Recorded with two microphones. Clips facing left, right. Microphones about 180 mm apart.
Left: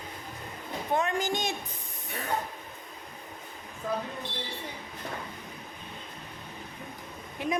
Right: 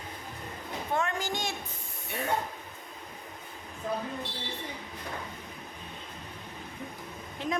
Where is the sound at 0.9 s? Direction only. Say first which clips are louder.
Left 3 dB; 20° left (ahead or behind).